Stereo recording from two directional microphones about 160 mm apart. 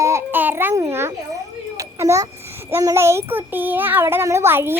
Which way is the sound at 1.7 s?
15° right (ahead or behind).